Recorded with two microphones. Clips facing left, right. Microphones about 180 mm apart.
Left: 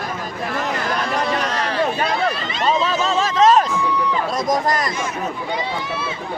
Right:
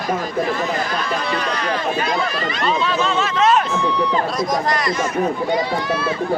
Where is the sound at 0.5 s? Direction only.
60° left (ahead or behind).